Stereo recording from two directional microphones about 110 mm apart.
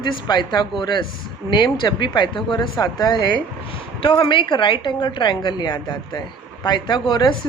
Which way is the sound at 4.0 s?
50° left (ahead or behind).